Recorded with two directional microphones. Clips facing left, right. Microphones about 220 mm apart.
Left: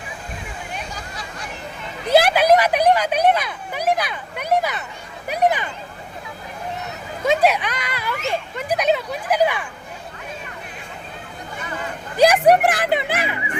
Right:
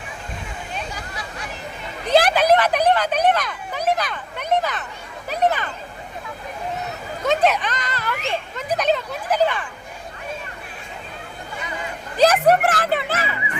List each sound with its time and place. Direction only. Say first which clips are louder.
2.0 s speech: left 1 dB; 10° left (ahead or behind)
7.3 s speech: left 1 dB; 10° left (ahead or behind)
12.1 s speech: left 2 dB; 10° left (ahead or behind)